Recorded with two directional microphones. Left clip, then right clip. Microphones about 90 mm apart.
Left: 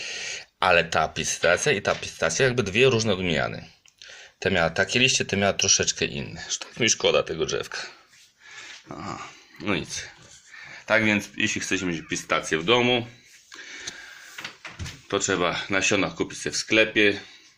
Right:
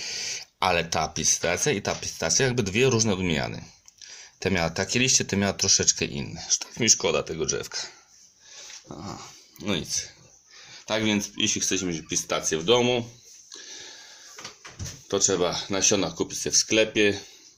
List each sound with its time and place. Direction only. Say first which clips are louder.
0.0 s speech: even; 65° right (ahead or behind)
9.0 s speech: left 4 dB; 25° right (ahead or behind)
10.8 s speech: left 5 dB; 10° right (ahead or behind)
11.3 s speech: even; 25° right (ahead or behind)
15.3 s speech: left 1 dB; 30° right (ahead or behind); by 17.2 s 45° right (ahead or behind)